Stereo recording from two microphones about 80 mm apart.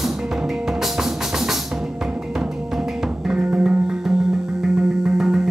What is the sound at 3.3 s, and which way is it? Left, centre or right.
Music, centre.